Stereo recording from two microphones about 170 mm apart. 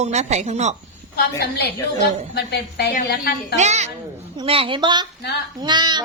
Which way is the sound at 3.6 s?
40° right (ahead or behind).